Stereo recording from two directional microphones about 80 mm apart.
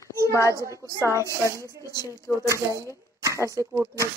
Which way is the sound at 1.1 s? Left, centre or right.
Right.